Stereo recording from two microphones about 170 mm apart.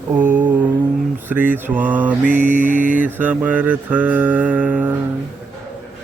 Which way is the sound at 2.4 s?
50° right (ahead or behind).